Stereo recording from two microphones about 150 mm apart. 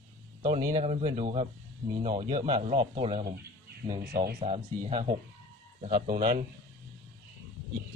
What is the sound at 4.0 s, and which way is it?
Speech, 90° right.